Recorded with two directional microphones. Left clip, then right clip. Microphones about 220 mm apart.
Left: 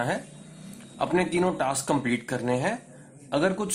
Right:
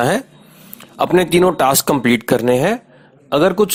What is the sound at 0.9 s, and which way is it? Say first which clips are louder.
A man's voice: right 12 dB; 45° right (ahead or behind).